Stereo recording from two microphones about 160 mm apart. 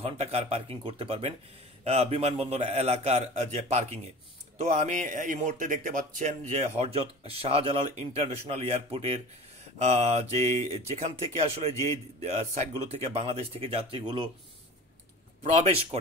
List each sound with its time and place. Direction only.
0.0 s a man's voice: 40° right (ahead or behind)
15.4 s speech: 40° right (ahead or behind)